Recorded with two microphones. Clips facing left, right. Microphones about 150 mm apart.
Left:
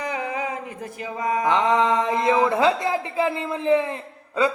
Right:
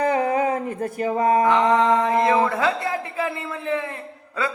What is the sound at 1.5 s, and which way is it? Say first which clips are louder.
A man's voice: right 2 dB; 20° left (ahead or behind).